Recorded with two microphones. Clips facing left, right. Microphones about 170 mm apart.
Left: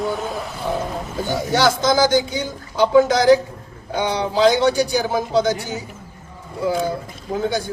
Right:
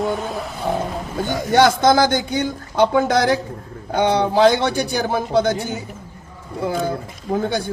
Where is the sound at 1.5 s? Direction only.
55° right (ahead or behind).